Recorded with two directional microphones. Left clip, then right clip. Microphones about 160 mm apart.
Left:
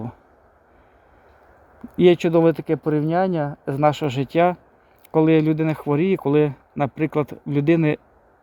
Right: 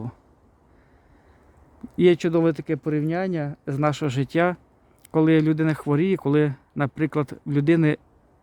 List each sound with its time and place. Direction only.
2.0 s speech: 20° right (ahead or behind)